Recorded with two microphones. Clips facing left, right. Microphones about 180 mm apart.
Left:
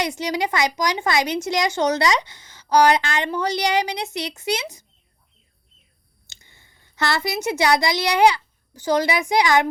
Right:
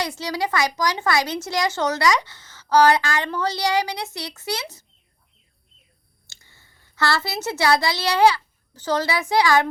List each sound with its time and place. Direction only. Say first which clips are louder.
0.0 s speech: left 2 dB; 20° left (ahead or behind)
6.2 s a woman's voice: left 1 dB; 20° left (ahead or behind)